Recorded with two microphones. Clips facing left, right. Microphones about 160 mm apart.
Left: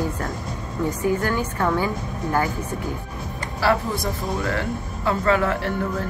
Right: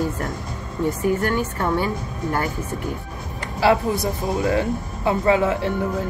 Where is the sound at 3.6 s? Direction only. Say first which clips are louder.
Right 3 dB; 20° right (ahead or behind).